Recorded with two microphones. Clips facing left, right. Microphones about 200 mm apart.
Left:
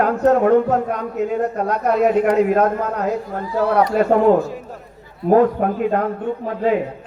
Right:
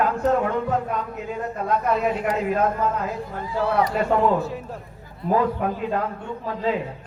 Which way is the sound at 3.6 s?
55° left (ahead or behind).